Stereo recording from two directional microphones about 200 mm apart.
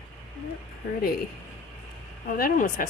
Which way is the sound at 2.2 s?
45° left (ahead or behind).